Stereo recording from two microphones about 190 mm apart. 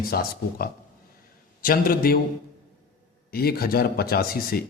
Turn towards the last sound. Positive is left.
turn(degrees=55)  # may be behind; listen again after turning